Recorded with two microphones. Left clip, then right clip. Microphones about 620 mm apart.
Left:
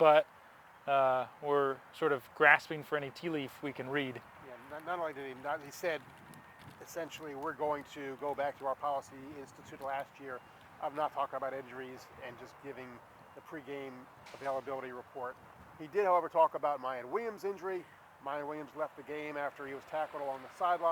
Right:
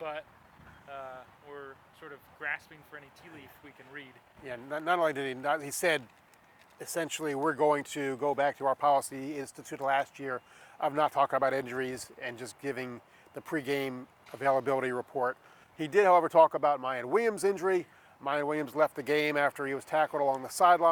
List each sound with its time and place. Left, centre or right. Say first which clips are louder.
0.0 s speech: left 14 dB; left
0.9 s speech: left 14 dB; left
4.7 s speech: right 10 dB; right